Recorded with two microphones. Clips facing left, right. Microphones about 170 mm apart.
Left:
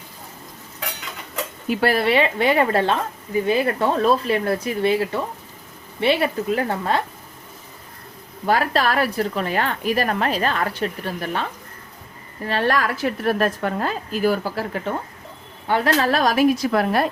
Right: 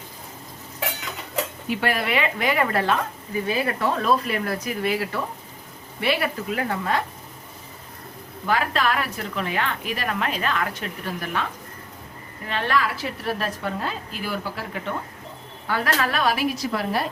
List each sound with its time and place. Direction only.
1.7 s a woman's voice: 35° left (ahead or behind)
8.4 s a woman's voice: 40° left (ahead or behind)
12.5 s a woman's voice: 40° left (ahead or behind)
15.6 s a woman's voice: 25° left (ahead or behind); by 17.1 s 55° left (ahead or behind)